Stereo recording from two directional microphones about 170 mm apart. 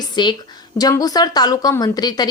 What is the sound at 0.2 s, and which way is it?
A woman's voice, 25° left (ahead or behind).